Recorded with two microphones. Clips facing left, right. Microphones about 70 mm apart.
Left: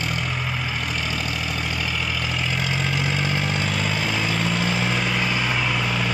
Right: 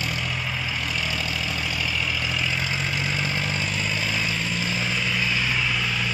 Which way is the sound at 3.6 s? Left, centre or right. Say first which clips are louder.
Left 3 dB; left.